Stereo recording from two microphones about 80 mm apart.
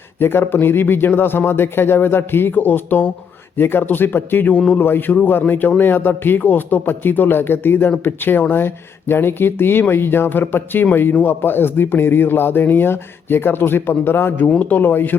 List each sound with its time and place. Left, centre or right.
0.2 s a man's voice: left